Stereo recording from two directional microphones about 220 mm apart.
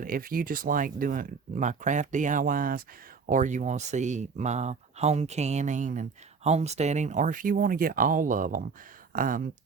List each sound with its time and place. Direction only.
0.0 s speech: 40° right (ahead or behind)